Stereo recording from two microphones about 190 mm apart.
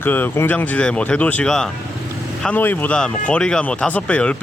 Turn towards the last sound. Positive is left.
turn(degrees=5)  # may be behind; listen again after turning